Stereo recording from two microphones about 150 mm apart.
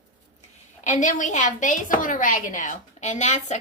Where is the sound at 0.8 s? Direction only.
55° left (ahead or behind).